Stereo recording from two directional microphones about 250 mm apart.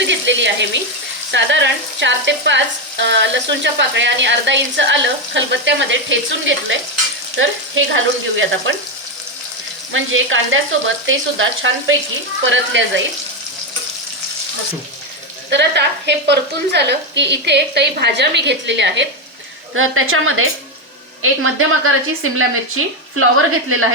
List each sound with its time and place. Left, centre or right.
0.0 s a sound: right
1.3 s speech: right
7.9 s speech: right
9.9 s speech: right
15.4 s a woman's voice: right